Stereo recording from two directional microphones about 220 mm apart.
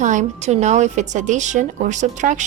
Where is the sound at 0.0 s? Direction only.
35° right (ahead or behind).